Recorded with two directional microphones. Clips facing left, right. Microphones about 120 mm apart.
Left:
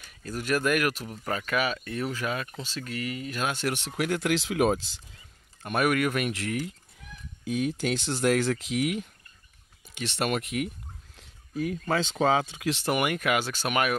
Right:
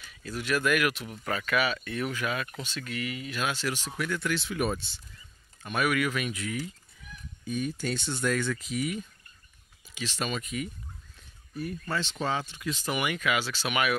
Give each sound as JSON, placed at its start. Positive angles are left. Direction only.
{"t": 0.0, "sound": "speech", "side_deg": 45}
{"t": 5.6, "sound": "speech", "side_deg": 50}
{"t": 7.4, "sound": "speech", "side_deg": 90}
{"t": 9.9, "sound": "speech", "side_deg": 65}
{"t": 11.1, "sound": "a sound", "side_deg": 90}
{"t": 12.6, "sound": "speech", "side_deg": 65}